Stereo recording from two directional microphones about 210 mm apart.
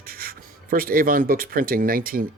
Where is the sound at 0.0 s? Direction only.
45° right (ahead or behind).